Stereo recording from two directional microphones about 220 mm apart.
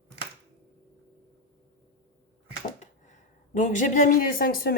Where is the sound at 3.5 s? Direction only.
35° left (ahead or behind).